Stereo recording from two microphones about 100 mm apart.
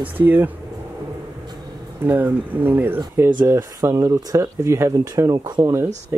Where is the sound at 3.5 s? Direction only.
30° right (ahead or behind).